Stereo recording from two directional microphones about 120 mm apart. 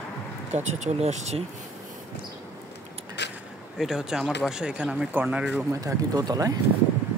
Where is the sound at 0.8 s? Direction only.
65° right (ahead or behind).